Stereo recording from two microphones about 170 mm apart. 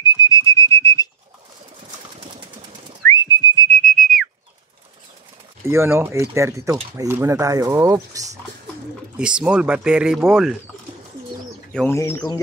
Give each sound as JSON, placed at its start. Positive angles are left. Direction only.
{"t": 0.0, "sound": "whistling", "side_deg": 25}
{"t": 2.3, "sound": "a sound", "side_deg": -25}
{"t": 3.1, "sound": "whistling", "side_deg": 25}
{"t": 3.7, "sound": "whistle", "side_deg": 5}
{"t": 5.7, "sound": "speech", "side_deg": -15}
{"t": 9.1, "sound": "speech", "side_deg": -5}
{"t": 11.7, "sound": "speech", "side_deg": 5}